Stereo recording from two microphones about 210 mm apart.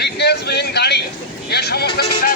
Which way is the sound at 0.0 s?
50° left (ahead or behind).